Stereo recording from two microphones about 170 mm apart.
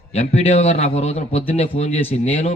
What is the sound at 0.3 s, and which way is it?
A man's voice, 40° left (ahead or behind).